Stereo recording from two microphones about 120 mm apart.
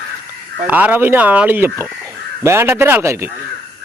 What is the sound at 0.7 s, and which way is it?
Speech, 15° right (ahead or behind).